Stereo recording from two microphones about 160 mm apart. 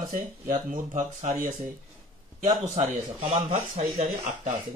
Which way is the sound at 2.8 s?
40° right (ahead or behind).